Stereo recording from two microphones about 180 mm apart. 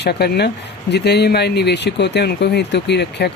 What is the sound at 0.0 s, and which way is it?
Speech, 65° left (ahead or behind).